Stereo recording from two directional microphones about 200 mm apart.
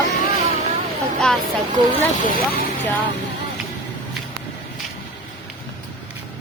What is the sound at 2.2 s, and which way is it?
Speech, 45° left (ahead or behind).